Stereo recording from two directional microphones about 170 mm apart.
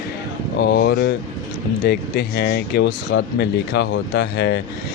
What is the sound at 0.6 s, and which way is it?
Speech, 70° left (ahead or behind).